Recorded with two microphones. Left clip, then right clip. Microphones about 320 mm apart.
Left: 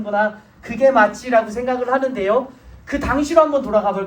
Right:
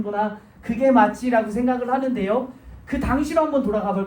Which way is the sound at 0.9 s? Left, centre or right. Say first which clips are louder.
Left 3 dB; left.